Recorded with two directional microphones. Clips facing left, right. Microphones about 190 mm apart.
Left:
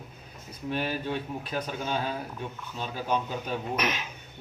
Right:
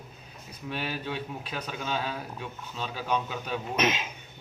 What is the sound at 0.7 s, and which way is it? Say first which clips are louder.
Speech: left 3 dB; 45° left (ahead or behind).